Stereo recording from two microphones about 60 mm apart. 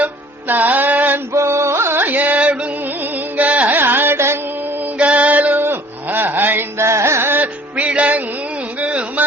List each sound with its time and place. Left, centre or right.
0.0 s music: right
1.3 s music: right
2.0 s music: right
3.8 s carnatic music: right
4.9 s music: right
5.6 s a sound: right
6.7 s music: right
8.8 s a sound: right